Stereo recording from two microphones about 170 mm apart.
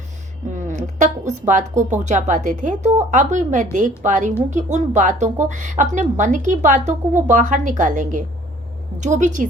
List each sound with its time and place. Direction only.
0.5 s speech: 45° right (ahead or behind)